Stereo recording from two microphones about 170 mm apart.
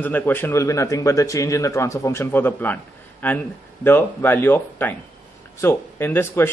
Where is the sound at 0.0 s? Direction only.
10° left (ahead or behind).